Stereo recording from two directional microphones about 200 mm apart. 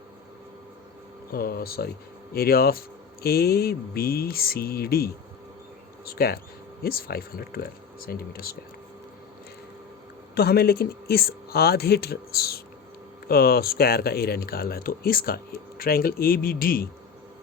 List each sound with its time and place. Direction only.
1.3 s speech: 50° left (ahead or behind)
10.3 s speech: 50° left (ahead or behind)